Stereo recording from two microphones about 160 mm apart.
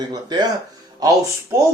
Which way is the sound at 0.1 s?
25° right (ahead or behind).